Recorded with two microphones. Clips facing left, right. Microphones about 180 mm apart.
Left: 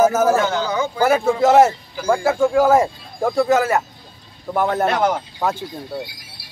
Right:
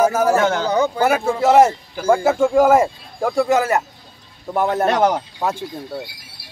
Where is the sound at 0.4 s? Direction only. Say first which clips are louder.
Right 2 dB; 55° right (ahead or behind).